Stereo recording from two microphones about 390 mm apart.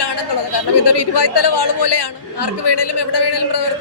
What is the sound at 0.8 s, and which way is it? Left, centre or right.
Speech, left.